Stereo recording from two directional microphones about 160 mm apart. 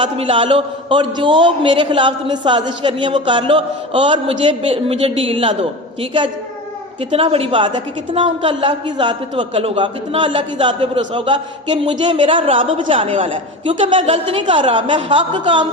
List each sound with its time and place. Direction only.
0.0 s a man's voice: 35° right (ahead or behind)
7.1 s a man's voice: 35° right (ahead or behind)